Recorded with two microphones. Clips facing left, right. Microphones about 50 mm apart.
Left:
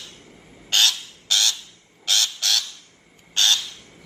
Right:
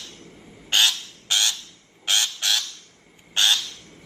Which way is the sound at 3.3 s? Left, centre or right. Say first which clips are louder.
Even; centre.